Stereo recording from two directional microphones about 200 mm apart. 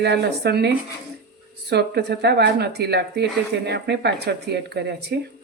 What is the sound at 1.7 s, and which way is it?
Speech, 55° right (ahead or behind).